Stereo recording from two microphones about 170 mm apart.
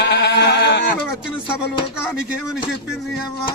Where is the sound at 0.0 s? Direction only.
85° left.